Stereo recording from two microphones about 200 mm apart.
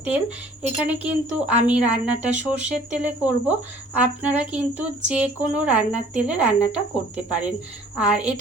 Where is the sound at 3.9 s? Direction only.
5° right (ahead or behind).